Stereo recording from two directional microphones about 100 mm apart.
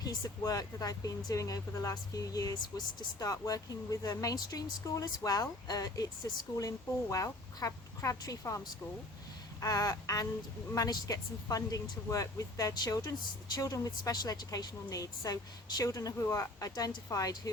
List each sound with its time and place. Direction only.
0.0 s a woman's voice: 40° left (ahead or behind)